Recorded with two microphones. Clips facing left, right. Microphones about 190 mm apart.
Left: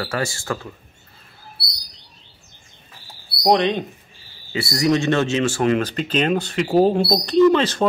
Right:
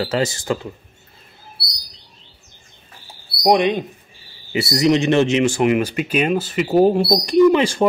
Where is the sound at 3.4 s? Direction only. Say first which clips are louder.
Right 2 dB; 15° right (ahead or behind).